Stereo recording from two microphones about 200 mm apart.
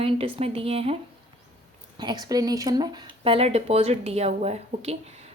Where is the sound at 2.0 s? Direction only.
20° right (ahead or behind).